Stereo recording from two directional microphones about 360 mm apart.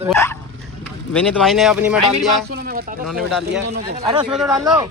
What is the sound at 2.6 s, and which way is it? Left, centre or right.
Speech, right.